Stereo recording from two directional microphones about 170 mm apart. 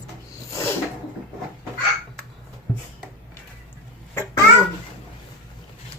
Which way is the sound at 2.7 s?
5° left (ahead or behind).